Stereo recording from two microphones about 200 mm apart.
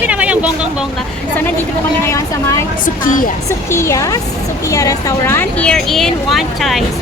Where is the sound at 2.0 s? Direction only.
15° left (ahead or behind).